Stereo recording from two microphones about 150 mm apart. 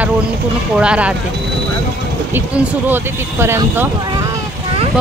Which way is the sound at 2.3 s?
15° right (ahead or behind).